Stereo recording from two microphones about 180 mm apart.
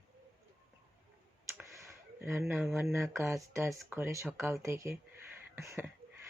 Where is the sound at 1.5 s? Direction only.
15° right (ahead or behind).